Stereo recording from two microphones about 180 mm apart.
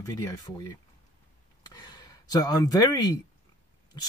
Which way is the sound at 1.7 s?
25° left (ahead or behind).